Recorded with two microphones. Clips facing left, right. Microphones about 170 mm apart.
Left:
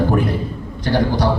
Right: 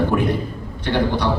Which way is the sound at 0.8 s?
40° left (ahead or behind).